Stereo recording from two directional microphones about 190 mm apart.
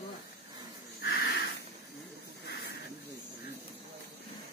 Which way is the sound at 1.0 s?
55° left (ahead or behind).